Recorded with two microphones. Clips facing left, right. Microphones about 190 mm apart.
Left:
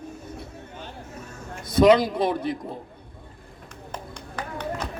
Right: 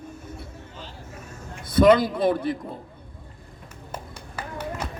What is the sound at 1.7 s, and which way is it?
Speech, 50° right (ahead or behind).